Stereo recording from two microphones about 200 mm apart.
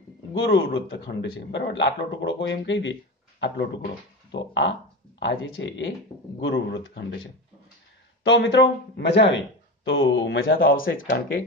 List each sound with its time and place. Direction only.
0.3 s speech: 60° left (ahead or behind)
8.2 s speech: 65° left (ahead or behind)
11.0 s speech: 60° left (ahead or behind)